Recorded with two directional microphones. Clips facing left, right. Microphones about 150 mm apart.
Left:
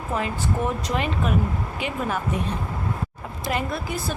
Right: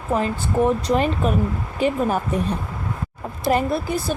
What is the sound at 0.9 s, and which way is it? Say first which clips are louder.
Speech: right 5 dB; 35° right (ahead or behind).